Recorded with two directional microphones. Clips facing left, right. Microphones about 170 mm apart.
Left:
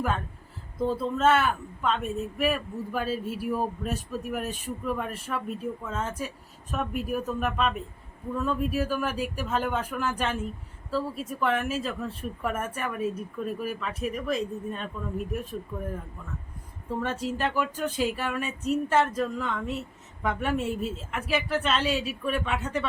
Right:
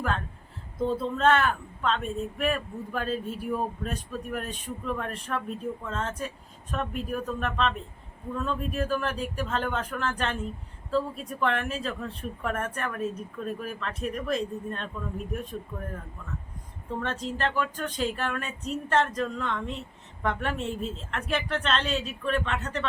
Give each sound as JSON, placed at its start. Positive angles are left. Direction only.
{"t": 0.8, "sound": "speech", "side_deg": 0}
{"t": 16.9, "sound": "speech", "side_deg": 10}